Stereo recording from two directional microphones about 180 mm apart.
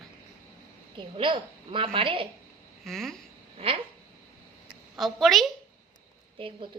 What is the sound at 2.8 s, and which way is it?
Speech, centre (ahead or behind).